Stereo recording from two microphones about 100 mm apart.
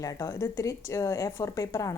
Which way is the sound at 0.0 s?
35° left (ahead or behind).